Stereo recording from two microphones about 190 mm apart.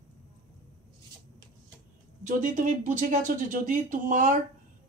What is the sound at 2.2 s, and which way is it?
Speech, 45° right (ahead or behind).